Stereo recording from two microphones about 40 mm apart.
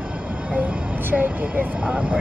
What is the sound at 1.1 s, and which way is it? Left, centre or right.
Vehicle, right.